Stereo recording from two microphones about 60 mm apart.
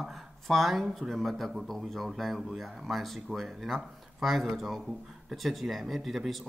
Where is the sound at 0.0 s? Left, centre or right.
Centre.